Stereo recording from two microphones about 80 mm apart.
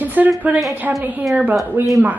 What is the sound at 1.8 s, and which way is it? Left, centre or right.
Speech, right.